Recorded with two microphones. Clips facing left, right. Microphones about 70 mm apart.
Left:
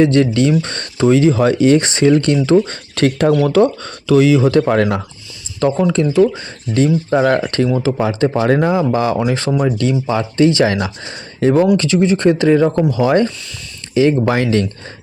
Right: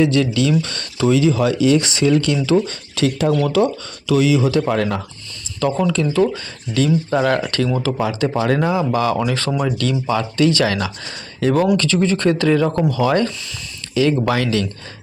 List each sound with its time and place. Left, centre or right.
0.0 s speech: left
5.7 s speech: left